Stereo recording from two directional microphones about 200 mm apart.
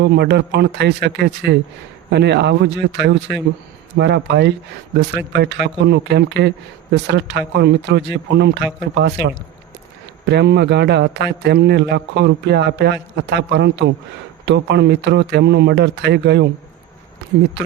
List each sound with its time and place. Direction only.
0.0 s a man's voice: 55° right (ahead or behind)